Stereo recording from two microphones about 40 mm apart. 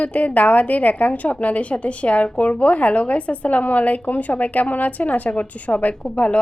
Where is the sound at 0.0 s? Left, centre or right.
Left.